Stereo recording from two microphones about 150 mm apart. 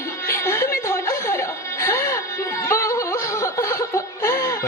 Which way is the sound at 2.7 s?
20° left (ahead or behind).